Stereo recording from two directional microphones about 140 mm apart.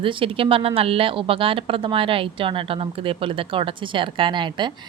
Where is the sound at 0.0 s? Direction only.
40° right (ahead or behind).